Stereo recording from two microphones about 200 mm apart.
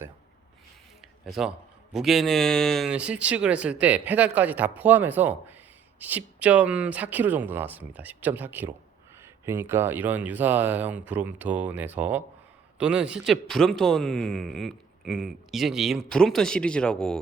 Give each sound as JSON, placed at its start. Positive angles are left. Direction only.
{"t": 1.2, "sound": "speech", "side_deg": 0}